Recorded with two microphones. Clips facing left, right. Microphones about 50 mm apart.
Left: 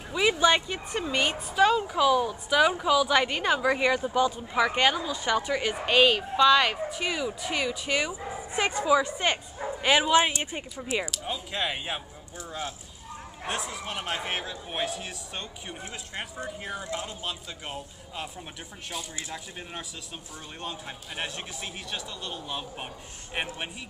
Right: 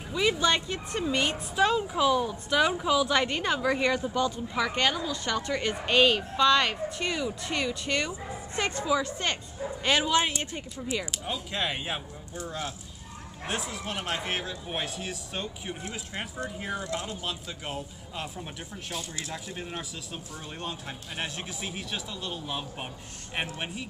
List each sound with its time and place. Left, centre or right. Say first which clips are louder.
0.1 s speech: left 3 dB; centre
11.2 s speech: even; centre
21.2 s speech: even; centre